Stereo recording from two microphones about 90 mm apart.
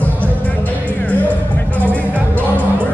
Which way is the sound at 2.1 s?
20° right (ahead or behind).